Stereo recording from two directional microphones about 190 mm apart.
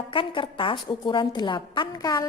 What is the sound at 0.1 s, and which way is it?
A woman's voice, 25° left (ahead or behind).